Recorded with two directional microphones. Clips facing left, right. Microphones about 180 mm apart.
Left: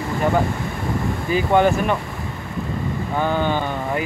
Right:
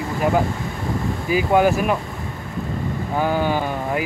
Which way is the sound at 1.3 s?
5° right (ahead or behind).